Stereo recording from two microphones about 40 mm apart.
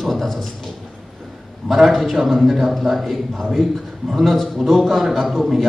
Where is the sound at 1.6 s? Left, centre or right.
Centre.